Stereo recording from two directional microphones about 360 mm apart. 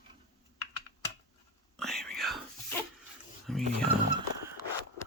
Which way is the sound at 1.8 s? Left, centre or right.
Centre.